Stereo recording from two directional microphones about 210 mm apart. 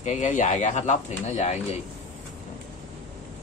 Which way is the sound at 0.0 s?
35° left (ahead or behind).